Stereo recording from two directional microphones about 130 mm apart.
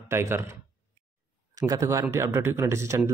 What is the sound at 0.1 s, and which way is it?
Speech, 20° right (ahead or behind).